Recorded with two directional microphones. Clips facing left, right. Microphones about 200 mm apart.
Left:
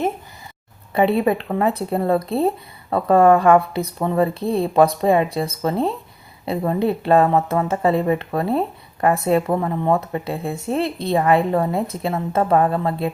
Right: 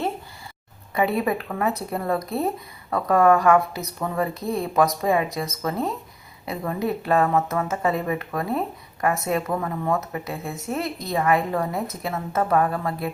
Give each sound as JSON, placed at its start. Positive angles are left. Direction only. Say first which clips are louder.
{"t": 0.9, "sound": "speech", "louder": "left 5 dB", "side_deg": 30}